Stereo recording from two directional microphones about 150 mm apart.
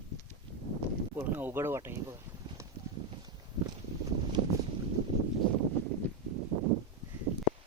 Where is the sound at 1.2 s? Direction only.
15° right (ahead or behind).